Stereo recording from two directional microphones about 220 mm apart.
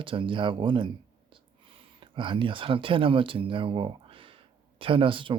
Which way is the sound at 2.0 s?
20° right (ahead or behind).